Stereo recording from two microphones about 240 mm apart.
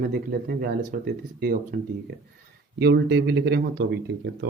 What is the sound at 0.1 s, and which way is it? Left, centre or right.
Speech, right.